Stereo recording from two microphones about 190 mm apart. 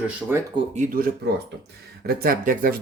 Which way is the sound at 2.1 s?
50° right (ahead or behind).